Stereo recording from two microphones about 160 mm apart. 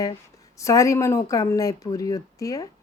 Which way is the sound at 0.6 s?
20° left (ahead or behind).